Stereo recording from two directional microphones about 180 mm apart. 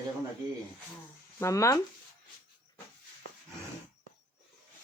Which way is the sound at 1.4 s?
15° left (ahead or behind).